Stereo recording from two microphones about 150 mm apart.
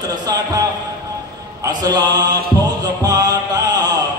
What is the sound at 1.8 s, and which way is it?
Speech, 25° right (ahead or behind).